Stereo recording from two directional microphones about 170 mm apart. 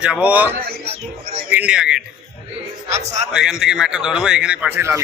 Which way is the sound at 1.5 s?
5° right (ahead or behind).